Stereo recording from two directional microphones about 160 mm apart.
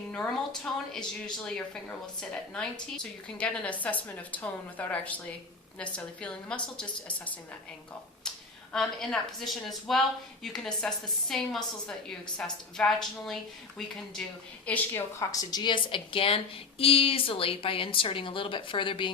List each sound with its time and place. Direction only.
0.9 s a woman's voice: 5° left (ahead or behind)
8.7 s a woman's voice: centre (ahead or behind)
14.7 s a woman's voice: 15° left (ahead or behind)